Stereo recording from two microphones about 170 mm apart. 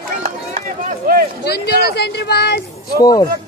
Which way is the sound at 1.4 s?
70° left (ahead or behind).